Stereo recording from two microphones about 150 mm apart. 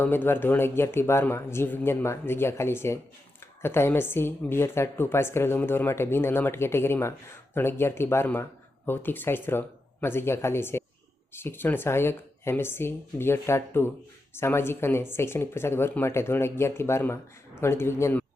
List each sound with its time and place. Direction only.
0.0 s a woman's voice: 15° left (ahead or behind)